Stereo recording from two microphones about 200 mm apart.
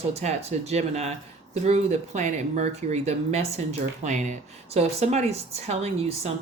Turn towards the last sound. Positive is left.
turn(degrees=-30)  # may be behind; listen again after turning